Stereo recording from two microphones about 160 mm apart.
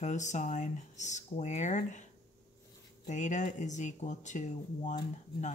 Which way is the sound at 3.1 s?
50° left (ahead or behind).